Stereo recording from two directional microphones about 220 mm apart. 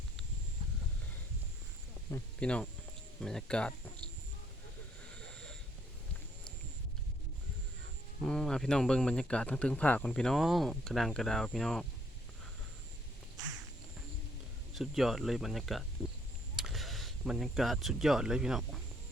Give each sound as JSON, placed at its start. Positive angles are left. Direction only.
{"t": 2.0, "sound": "speech", "side_deg": 10}
{"t": 8.2, "sound": "speech", "side_deg": 5}
{"t": 14.8, "sound": "speech", "side_deg": 0}